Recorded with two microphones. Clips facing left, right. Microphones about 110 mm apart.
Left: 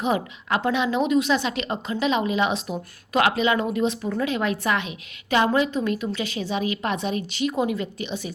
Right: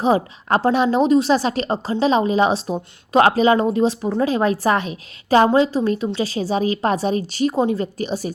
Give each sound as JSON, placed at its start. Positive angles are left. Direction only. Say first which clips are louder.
{"t": 0.0, "sound": "a woman's voice", "louder": "right 6 dB", "side_deg": -35}